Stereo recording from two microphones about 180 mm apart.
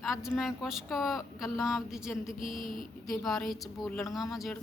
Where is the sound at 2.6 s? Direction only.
50° left (ahead or behind).